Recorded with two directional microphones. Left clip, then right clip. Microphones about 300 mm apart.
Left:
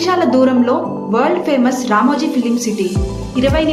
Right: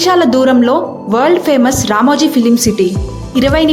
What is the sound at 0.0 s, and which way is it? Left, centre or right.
Speech, right.